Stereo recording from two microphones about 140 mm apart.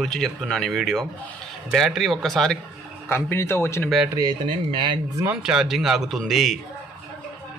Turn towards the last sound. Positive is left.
turn(degrees=0)  # may be behind; listen again after turning